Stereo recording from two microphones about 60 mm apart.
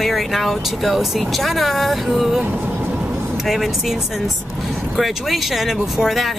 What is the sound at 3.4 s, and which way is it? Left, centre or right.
Speech, centre.